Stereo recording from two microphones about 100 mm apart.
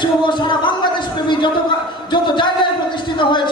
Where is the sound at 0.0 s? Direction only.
50° left (ahead or behind).